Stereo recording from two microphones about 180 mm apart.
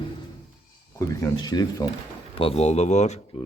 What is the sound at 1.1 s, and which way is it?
Speech, 15° left (ahead or behind).